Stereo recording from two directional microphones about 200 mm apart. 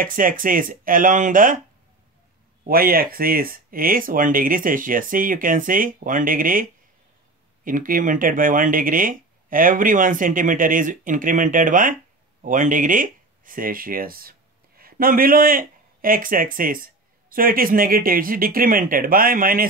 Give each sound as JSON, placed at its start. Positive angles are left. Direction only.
{"t": 0.0, "sound": "speech", "side_deg": -45}
{"t": 2.7, "sound": "speech", "side_deg": -50}